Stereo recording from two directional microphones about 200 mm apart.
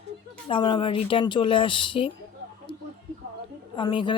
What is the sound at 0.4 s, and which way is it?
Speech, 25° left (ahead or behind).